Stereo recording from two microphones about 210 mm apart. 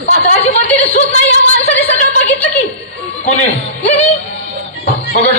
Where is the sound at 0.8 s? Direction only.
30° left (ahead or behind).